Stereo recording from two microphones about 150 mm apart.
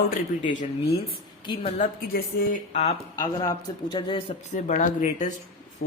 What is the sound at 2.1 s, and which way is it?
Speech, 85° left.